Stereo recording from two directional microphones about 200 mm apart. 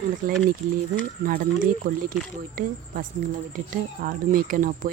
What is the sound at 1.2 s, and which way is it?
Speech, 45° right (ahead or behind).